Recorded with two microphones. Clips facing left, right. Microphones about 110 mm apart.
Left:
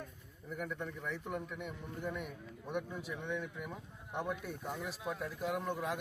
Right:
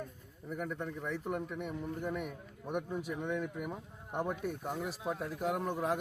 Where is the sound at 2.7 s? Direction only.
45° right (ahead or behind).